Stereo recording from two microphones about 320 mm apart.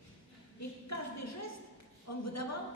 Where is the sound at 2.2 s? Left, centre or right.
Left.